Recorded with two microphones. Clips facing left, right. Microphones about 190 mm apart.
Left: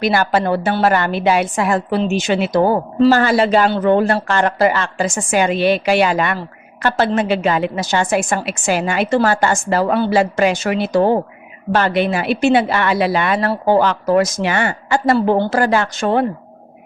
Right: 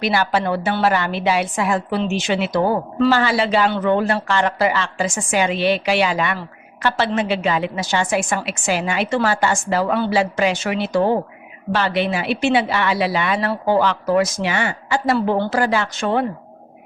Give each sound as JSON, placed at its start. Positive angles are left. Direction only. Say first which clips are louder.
{"t": 0.0, "sound": "a woman's voice", "louder": "left 3 dB", "side_deg": 45}